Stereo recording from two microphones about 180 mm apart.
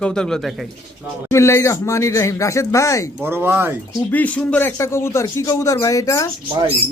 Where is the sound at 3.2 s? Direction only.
10° right (ahead or behind).